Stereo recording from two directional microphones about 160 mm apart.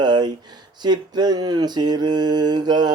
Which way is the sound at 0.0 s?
25° right (ahead or behind).